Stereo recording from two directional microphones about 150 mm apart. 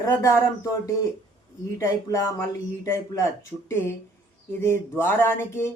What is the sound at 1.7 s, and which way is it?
Speech, 20° left (ahead or behind).